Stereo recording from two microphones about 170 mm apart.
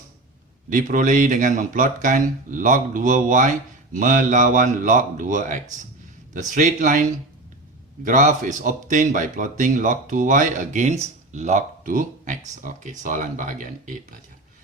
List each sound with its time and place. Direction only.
0.7 s speech: 50° right (ahead or behind)
8.0 s speech: 45° right (ahead or behind)